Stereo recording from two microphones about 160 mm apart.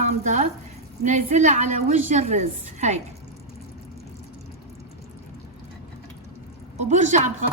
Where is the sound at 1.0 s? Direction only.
45° right (ahead or behind).